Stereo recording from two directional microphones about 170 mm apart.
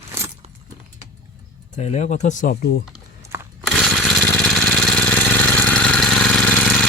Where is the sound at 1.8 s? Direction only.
40° left (ahead or behind); by 2.8 s 60° left (ahead or behind).